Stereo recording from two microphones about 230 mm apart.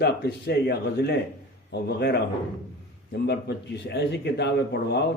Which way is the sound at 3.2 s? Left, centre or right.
Left.